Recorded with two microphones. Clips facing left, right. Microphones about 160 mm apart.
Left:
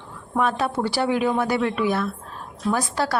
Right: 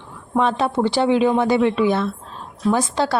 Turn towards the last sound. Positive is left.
turn(degrees=-25)  # may be behind; listen again after turning